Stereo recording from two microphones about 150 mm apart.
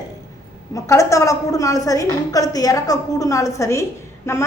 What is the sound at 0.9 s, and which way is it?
A woman's voice, 20° left (ahead or behind).